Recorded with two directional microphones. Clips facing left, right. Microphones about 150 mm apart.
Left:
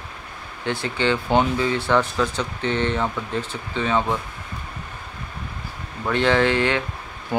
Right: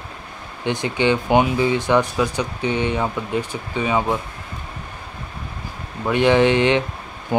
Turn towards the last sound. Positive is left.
turn(degrees=-20)  # may be behind; listen again after turning